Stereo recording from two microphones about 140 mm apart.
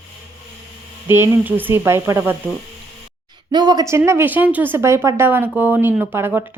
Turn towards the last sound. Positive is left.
turn(degrees=-15)  # may be behind; listen again after turning